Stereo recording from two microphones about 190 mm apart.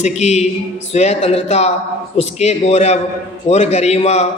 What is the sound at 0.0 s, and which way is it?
A man's voice, 35° left (ahead or behind).